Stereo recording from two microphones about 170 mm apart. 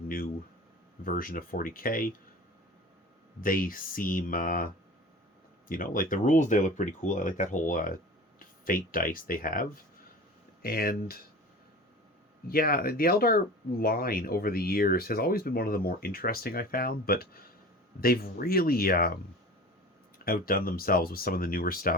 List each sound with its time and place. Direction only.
1.0 s speech: 55° left (ahead or behind)
3.4 s speech: 55° left (ahead or behind)
12.5 s speech: 60° left (ahead or behind)